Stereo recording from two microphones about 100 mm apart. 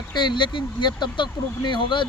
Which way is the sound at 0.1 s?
50° left (ahead or behind).